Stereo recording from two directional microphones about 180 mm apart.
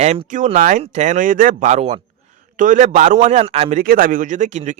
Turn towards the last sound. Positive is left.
turn(degrees=-40)  # may be behind; listen again after turning